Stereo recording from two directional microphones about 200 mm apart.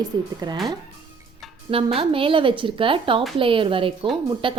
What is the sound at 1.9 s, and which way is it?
A woman's voice, 25° right (ahead or behind).